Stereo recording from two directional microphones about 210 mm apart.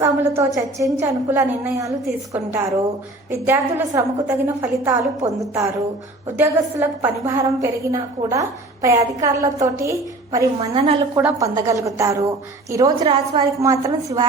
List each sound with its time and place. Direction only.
0.0 s a woman's voice: 15° right (ahead or behind)